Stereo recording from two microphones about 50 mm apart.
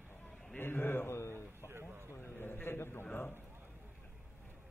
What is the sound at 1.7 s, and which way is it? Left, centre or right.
Speech, right.